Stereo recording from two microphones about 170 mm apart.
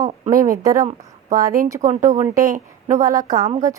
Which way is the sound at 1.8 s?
50° right (ahead or behind).